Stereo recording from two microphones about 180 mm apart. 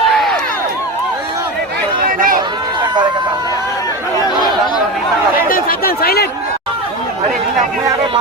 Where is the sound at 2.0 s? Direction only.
50° right (ahead or behind).